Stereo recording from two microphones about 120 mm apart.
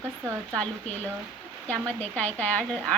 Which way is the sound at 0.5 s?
10° left (ahead or behind).